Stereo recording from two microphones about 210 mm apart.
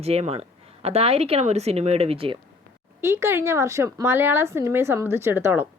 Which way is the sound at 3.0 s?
10° right (ahead or behind).